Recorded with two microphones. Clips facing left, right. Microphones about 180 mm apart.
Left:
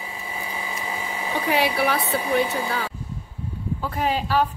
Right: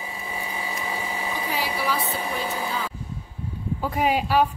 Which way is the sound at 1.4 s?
70° left (ahead or behind).